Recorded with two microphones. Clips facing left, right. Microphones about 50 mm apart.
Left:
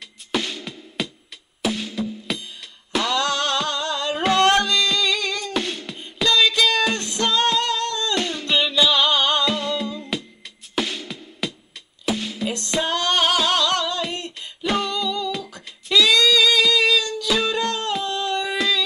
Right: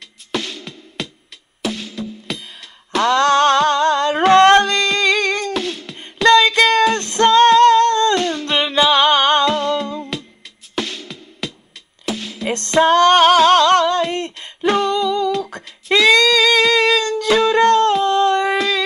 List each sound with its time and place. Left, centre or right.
0.3 s music: centre
3.1 s music: right
5.5 s beatboxing: centre
6.2 s music: right
8.2 s humming: centre
8.5 s music: right
9.5 s humming: centre
10.1 s music: centre
12.4 s music: right
14.1 s a sound: right
14.9 s humming: right
15.4 s singing: right
17.5 s music: right